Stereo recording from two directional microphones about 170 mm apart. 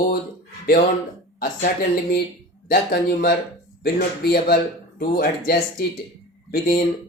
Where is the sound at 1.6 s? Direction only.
60° left (ahead or behind).